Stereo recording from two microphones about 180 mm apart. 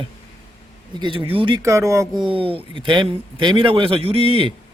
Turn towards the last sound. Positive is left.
turn(degrees=-30)  # may be behind; listen again after turning